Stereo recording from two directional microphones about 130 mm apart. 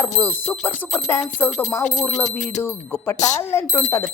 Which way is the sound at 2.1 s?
70° left (ahead or behind).